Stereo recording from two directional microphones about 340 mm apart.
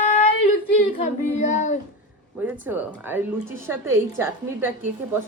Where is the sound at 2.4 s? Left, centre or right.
Centre.